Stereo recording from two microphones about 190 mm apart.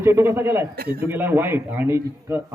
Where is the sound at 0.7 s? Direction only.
55° right (ahead or behind).